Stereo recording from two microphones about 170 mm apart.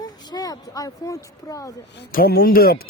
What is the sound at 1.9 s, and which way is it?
Speech, 60° left (ahead or behind).